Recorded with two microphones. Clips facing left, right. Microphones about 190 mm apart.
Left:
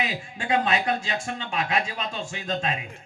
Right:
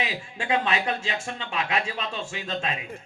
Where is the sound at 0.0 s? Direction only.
40° left (ahead or behind).